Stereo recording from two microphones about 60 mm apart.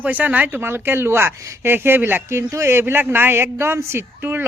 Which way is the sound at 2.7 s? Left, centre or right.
Right.